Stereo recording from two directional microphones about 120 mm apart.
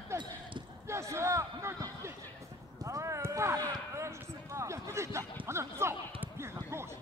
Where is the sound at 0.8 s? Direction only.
25° right (ahead or behind).